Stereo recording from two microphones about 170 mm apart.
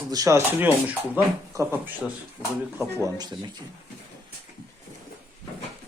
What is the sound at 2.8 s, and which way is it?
Speech, 20° right (ahead or behind).